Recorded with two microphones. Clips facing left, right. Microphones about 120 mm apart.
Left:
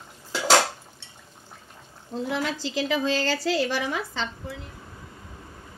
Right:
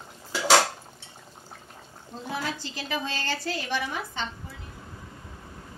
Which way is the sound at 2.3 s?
90° left.